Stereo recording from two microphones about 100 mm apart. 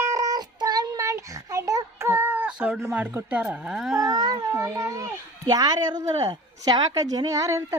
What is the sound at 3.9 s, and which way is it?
Speech, 35° right (ahead or behind).